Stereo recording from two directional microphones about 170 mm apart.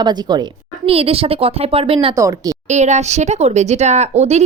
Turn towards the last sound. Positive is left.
turn(degrees=-40)  # may be behind; listen again after turning